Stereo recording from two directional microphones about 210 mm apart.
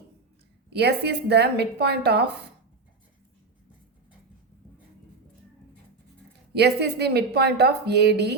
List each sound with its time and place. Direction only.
0.7 s speech: 50° right (ahead or behind)
6.5 s speech: 50° right (ahead or behind)